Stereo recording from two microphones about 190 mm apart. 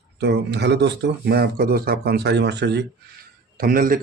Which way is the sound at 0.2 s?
60° right (ahead or behind).